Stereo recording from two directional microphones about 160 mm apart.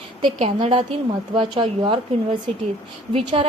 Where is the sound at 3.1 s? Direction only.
35° right (ahead or behind).